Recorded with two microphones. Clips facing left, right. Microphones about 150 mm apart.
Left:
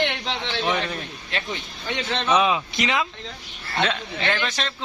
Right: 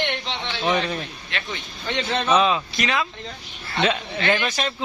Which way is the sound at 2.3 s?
10° left (ahead or behind).